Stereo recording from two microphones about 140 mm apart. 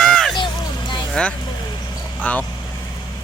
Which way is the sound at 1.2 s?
5° left (ahead or behind).